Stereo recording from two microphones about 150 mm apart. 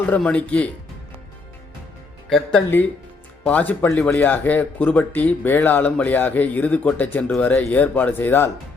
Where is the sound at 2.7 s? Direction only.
15° left (ahead or behind).